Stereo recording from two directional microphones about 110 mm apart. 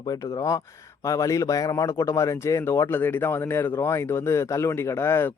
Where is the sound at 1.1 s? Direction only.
30° left (ahead or behind).